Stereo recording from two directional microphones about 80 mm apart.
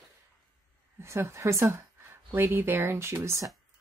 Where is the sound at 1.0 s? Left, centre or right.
Right.